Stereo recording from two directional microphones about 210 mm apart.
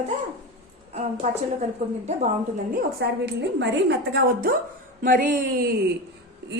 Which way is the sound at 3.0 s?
55° right (ahead or behind).